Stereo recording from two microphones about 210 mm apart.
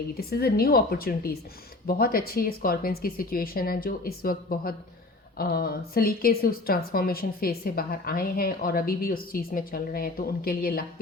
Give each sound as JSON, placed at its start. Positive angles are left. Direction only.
{"t": 0.1, "sound": "a woman's voice", "side_deg": 45}